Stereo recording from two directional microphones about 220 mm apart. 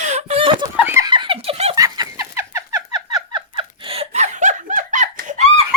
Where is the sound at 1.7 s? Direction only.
15° right (ahead or behind); by 5.5 s 35° right (ahead or behind).